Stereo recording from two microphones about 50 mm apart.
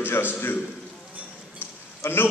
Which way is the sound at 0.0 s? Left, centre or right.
Left.